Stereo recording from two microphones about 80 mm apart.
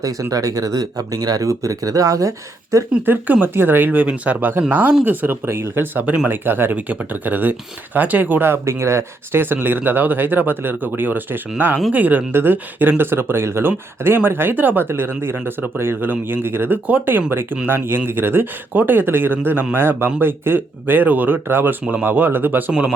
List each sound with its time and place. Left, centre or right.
0.0 s speech: right
3.1 s speech: right